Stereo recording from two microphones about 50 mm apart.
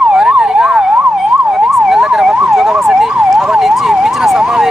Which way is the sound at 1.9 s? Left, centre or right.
Centre.